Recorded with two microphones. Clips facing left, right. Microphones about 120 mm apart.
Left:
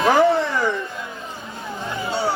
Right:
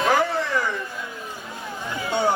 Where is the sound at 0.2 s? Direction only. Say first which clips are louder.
Left 6 dB; 25° left (ahead or behind).